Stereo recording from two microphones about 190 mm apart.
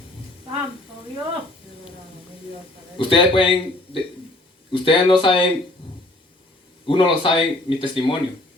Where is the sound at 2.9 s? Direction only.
25° left (ahead or behind).